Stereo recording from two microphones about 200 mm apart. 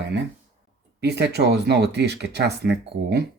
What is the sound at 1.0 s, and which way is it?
Speech, 55° right (ahead or behind).